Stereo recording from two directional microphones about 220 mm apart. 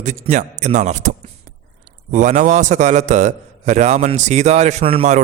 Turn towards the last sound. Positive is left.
turn(degrees=-25)  # may be behind; listen again after turning